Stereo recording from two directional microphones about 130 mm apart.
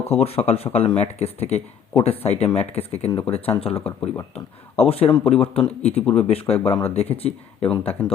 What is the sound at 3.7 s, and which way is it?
Speech, 10° left (ahead or behind).